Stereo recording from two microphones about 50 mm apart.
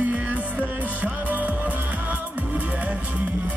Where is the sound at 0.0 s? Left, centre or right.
Right.